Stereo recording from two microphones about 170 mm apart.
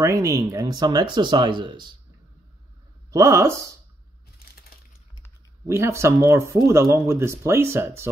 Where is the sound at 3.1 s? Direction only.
20° right (ahead or behind).